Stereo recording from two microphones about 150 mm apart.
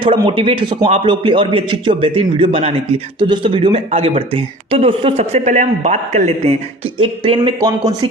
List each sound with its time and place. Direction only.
0.0 s a man's voice: 35° right (ahead or behind)
0.9 s a man's voice: 40° right (ahead or behind)
7.0 s a man's voice: 35° right (ahead or behind)